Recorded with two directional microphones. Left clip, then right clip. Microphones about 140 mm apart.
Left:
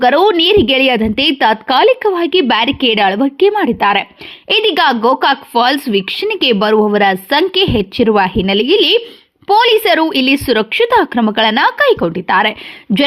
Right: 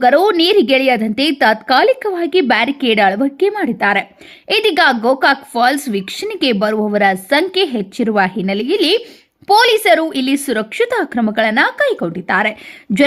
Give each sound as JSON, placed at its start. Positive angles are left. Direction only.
{"t": 0.0, "sound": "a woman's voice", "side_deg": 20}
{"t": 4.4, "sound": "a woman's voice", "side_deg": 25}